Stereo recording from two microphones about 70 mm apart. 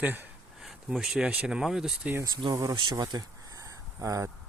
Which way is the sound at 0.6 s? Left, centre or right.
Centre.